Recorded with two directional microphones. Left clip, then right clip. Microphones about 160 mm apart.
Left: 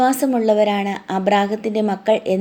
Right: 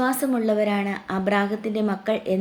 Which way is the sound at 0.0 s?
35° left (ahead or behind).